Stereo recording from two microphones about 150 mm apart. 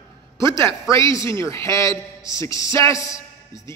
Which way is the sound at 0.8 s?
20° left (ahead or behind).